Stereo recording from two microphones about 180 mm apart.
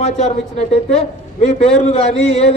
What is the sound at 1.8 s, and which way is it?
Speech, 35° left (ahead or behind).